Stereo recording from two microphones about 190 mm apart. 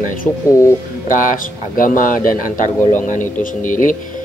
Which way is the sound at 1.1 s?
45° left (ahead or behind).